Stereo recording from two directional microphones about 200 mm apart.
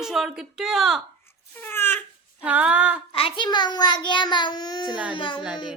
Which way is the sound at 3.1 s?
25° left (ahead or behind).